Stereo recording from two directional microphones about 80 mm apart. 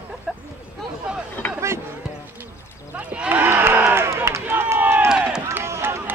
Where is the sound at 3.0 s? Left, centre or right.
Centre.